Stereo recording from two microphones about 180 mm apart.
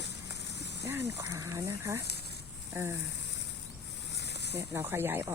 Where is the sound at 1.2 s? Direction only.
20° right (ahead or behind).